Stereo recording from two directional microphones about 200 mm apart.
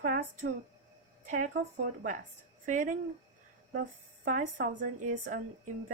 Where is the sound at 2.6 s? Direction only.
40° right (ahead or behind).